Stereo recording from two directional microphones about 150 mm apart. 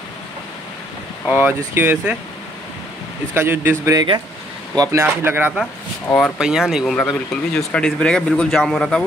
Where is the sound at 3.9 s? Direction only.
25° right (ahead or behind).